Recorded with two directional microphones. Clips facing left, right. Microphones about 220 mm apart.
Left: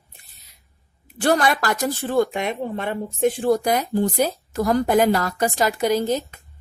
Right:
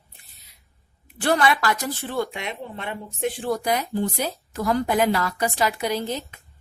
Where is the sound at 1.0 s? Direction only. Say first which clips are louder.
Left 2 dB; 45° left (ahead or behind).